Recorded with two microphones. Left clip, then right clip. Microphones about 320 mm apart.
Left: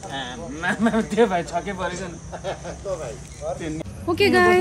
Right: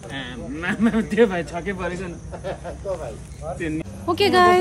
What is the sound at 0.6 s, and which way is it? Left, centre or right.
A man's voice, centre.